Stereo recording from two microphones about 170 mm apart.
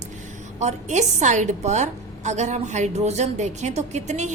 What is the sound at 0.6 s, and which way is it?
A woman's voice, 45° right (ahead or behind).